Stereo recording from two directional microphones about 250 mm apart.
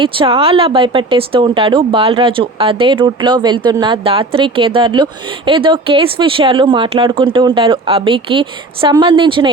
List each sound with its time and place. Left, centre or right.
0.0 s speech: right